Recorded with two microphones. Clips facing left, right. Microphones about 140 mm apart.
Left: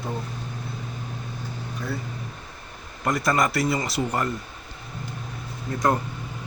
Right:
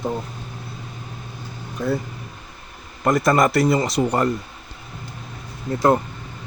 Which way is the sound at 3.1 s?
50° right (ahead or behind).